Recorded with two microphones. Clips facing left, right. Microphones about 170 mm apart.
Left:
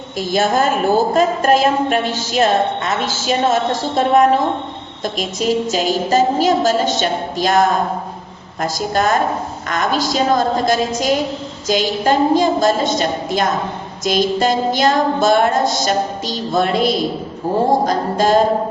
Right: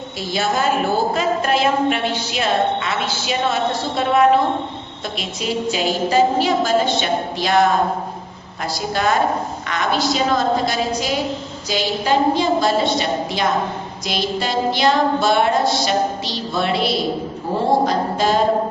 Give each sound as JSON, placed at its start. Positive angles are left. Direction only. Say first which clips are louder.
{"t": 0.3, "sound": "a woman's voice", "louder": "left 3 dB", "side_deg": 45}
{"t": 8.6, "sound": "a woman's voice", "louder": "left 3 dB", "side_deg": 45}